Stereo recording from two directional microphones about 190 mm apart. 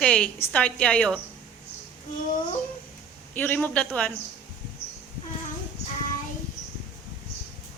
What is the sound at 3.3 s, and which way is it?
Speech, 10° left (ahead or behind).